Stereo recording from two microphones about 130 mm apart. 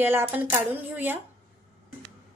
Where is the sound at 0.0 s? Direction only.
15° right (ahead or behind).